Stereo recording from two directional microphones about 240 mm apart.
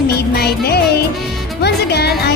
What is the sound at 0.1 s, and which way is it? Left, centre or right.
Music, left.